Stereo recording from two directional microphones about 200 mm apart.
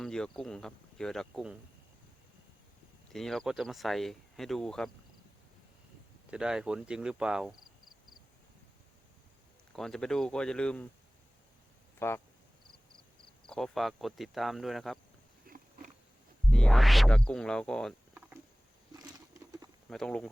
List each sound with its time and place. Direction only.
0.0 s speech: 5° left (ahead or behind)
3.1 s speech: centre (ahead or behind)
6.3 s speech: 5° right (ahead or behind)
9.7 s speech: centre (ahead or behind)
11.9 s speech: 10° left (ahead or behind)
13.5 s speech: centre (ahead or behind)
15.5 s cat: 45° right (ahead or behind)
16.5 s speech: 5° left (ahead or behind)
18.1 s a sound: 5° right (ahead or behind)
18.9 s patter: 20° right (ahead or behind)
19.9 s speech: 5° left (ahead or behind)